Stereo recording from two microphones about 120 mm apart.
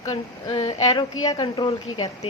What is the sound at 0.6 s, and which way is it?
A woman's voice, 30° left (ahead or behind).